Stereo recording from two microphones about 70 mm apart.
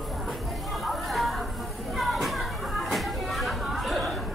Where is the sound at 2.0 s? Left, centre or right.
Centre.